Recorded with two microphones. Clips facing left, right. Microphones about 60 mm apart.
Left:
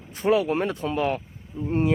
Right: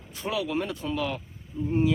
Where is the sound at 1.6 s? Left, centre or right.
Left.